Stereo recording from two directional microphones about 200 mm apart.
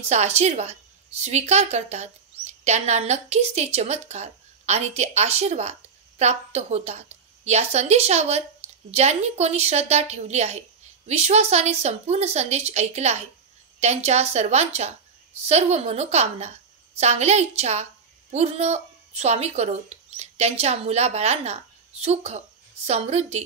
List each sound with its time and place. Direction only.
0.1 s a woman's voice: 35° right (ahead or behind)